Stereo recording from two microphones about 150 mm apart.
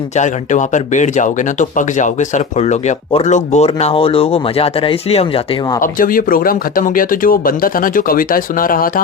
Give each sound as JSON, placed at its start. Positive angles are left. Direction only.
{"t": 0.2, "sound": "speech", "side_deg": 55}
{"t": 5.8, "sound": "speech", "side_deg": 65}